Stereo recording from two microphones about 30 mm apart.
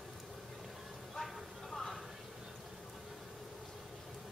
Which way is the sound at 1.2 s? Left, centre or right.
Left.